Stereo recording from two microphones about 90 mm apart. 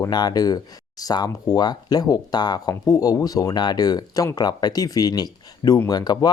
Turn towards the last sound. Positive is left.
turn(degrees=50)  # may be behind; listen again after turning